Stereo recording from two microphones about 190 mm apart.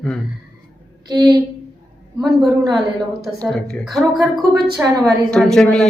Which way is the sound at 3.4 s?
Centre (ahead or behind).